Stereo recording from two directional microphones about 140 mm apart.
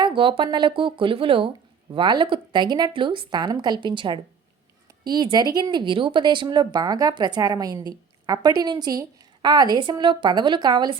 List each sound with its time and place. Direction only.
0.0 s speech: 35° right (ahead or behind)